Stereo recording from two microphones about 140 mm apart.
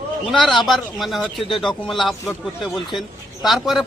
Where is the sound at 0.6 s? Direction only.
Centre (ahead or behind).